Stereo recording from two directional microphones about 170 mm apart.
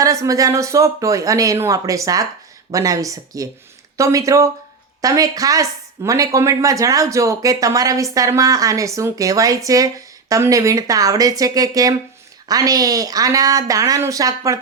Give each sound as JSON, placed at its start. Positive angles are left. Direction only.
{"t": 0.0, "sound": "speech", "side_deg": -20}